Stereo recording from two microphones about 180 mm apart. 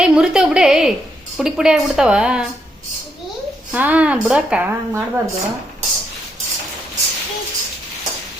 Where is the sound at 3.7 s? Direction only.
10° right (ahead or behind).